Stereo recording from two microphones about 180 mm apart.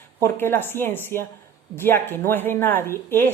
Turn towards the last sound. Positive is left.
turn(degrees=15)  # may be behind; listen again after turning